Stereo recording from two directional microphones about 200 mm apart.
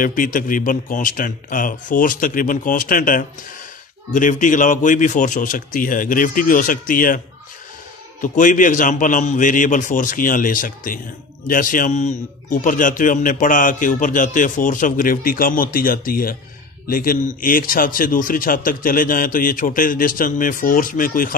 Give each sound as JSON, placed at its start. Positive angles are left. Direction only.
{"t": 0.0, "sound": "a man's voice", "side_deg": 45}
{"t": 8.2, "sound": "a man's voice", "side_deg": 40}